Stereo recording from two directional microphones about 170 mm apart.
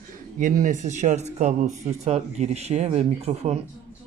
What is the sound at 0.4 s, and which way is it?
Speech, 50° right (ahead or behind).